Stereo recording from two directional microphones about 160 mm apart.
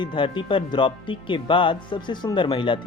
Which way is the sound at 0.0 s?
30° left (ahead or behind).